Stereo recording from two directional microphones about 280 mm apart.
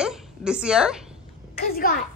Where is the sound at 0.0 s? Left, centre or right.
Centre.